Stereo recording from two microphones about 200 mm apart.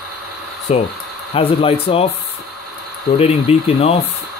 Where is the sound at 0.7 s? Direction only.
30° left (ahead or behind).